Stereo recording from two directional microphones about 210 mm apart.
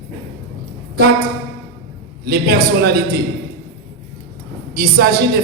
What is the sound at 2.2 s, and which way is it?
Speech, 45° right (ahead or behind).